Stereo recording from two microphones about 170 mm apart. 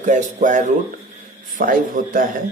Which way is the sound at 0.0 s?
45° right (ahead or behind).